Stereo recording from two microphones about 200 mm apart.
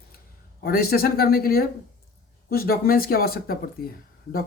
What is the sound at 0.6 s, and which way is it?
Speech, 50° left (ahead or behind).